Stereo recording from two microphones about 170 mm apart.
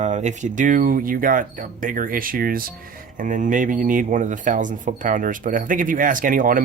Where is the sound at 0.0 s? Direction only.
45° right (ahead or behind).